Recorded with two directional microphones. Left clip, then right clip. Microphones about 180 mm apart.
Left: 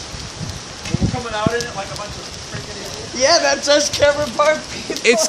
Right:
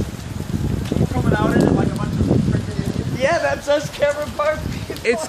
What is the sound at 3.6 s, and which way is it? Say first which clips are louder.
Speech: left 4 dB; 50° left (ahead or behind).